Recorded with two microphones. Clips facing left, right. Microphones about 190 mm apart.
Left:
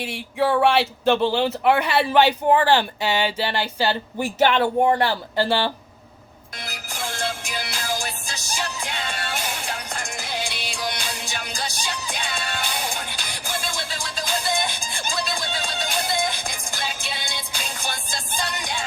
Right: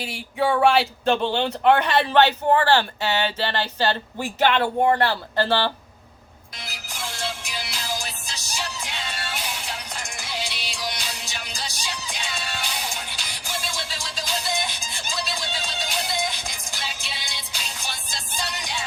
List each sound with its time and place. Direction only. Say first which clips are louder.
0.0 s speech: left 1 dB; centre (ahead or behind)
6.7 s music: left 3 dB; 55° left (ahead or behind)